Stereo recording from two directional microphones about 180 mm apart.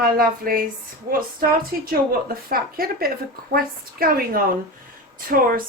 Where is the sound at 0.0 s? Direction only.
55° right (ahead or behind).